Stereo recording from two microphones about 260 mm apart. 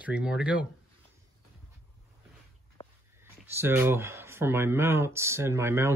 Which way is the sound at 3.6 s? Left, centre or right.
Centre.